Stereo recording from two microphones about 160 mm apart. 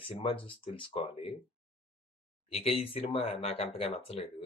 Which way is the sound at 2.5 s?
40° left (ahead or behind).